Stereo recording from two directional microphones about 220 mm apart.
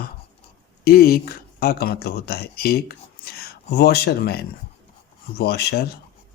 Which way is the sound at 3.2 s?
45° left (ahead or behind).